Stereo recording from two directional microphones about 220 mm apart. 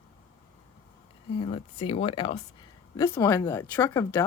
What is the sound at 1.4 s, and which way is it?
Speech, 25° left (ahead or behind).